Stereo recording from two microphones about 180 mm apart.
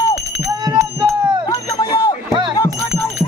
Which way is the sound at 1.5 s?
25° left (ahead or behind).